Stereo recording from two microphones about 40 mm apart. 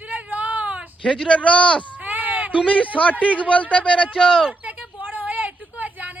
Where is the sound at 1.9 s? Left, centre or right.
Right.